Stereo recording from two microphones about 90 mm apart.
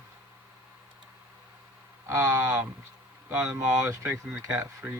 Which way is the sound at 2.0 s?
35° right (ahead or behind).